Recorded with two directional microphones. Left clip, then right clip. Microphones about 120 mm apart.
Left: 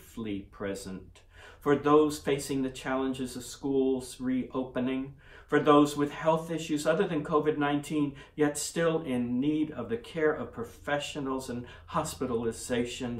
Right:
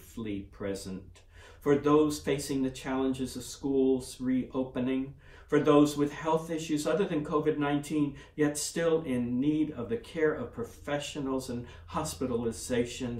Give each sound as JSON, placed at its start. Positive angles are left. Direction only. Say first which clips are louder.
{"t": 0.1, "sound": "a man's voice", "louder": "left 1 dB", "side_deg": 40}